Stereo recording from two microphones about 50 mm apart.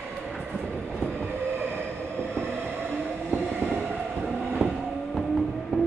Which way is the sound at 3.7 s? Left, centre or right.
Centre.